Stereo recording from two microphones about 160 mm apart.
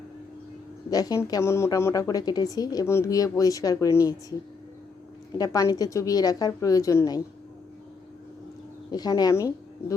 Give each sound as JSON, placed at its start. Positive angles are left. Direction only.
{"t": 0.9, "sound": "a woman's voice", "side_deg": 25}
{"t": 5.4, "sound": "a woman's voice", "side_deg": 20}
{"t": 8.9, "sound": "a woman's voice", "side_deg": 25}